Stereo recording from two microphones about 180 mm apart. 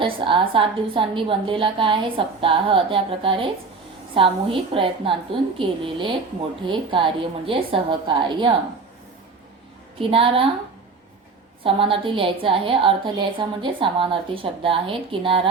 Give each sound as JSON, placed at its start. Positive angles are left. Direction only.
{"t": 0.0, "sound": "a woman's voice", "side_deg": -30}
{"t": 10.0, "sound": "a woman's voice", "side_deg": -30}
{"t": 11.6, "sound": "a woman's voice", "side_deg": -30}